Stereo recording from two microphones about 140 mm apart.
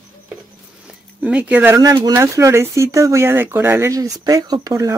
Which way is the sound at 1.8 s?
25° right (ahead or behind).